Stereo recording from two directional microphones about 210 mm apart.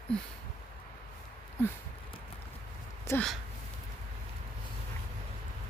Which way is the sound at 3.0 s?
10° left (ahead or behind).